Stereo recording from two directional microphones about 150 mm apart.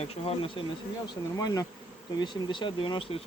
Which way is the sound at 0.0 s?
40° left (ahead or behind).